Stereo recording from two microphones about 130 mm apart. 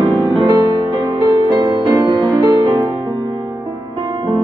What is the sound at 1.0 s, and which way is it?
Music, 35° right (ahead or behind).